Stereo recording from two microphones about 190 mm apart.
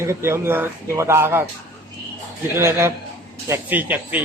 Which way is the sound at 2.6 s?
15° right (ahead or behind).